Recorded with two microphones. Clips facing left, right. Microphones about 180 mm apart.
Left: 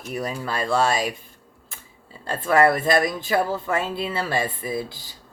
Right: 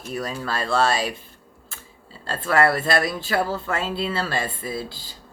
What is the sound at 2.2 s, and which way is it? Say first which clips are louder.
Speech: left 2 dB; 15° left (ahead or behind).